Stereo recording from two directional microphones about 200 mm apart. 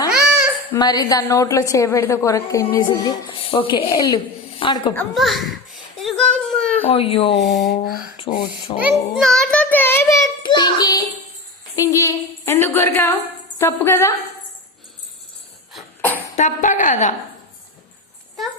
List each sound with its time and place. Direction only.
0.1 s babbling: 5° right (ahead or behind)
0.7 s a woman's voice: 20° left (ahead or behind)
4.9 s a sound: centre (ahead or behind)
6.8 s speech: 30° left (ahead or behind)
7.3 s a sound: centre (ahead or behind)
8.8 s a child's voice: centre (ahead or behind)
10.4 s child singing: 20° left (ahead or behind)
11.8 s a woman's voice: 15° left (ahead or behind)
15.7 s cough: 10° left (ahead or behind)
16.3 s a woman's voice: 40° left (ahead or behind)